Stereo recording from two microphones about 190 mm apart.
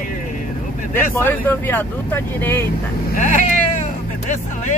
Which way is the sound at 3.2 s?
40° left (ahead or behind).